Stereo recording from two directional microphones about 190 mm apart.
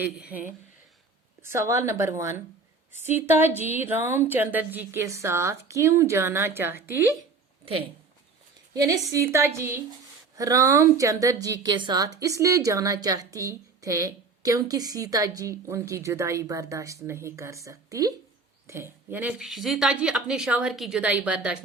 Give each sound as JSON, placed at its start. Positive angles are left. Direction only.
{"t": 0.0, "sound": "a woman's voice", "side_deg": -10}
{"t": 7.6, "sound": "a woman's voice", "side_deg": -30}